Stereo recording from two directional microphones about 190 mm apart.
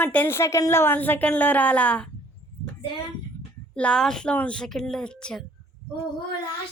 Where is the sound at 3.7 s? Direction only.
5° left (ahead or behind).